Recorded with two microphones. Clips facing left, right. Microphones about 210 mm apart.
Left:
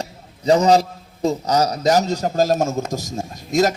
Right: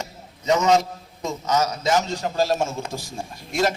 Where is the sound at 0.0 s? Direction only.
35° left (ahead or behind).